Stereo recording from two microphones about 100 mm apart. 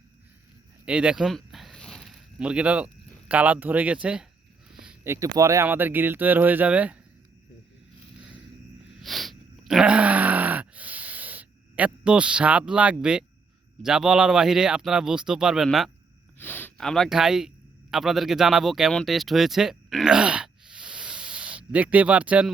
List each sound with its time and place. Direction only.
0.9 s a sound: 10° right (ahead or behind); by 2.1 s 5° left (ahead or behind)
2.4 s speech: 10° right (ahead or behind)
4.7 s a sound: 5° right (ahead or behind)
5.0 s speech: 30° right (ahead or behind)
5.6 s speech: 20° right (ahead or behind)
8.9 s groan: centre (ahead or behind)
13.8 s speech: 5° right (ahead or behind)
16.4 s speech: 20° left (ahead or behind)
16.7 s speech: 5° left (ahead or behind)
20.1 s a sound: 10° right (ahead or behind)